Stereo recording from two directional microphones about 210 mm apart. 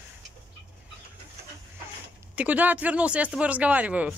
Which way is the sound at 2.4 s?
5° right (ahead or behind).